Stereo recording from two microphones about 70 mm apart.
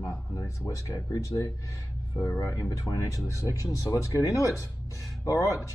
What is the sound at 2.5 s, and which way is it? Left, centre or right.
Speech, left.